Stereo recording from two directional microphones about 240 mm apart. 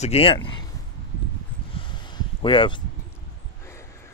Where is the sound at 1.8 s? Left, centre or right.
Centre.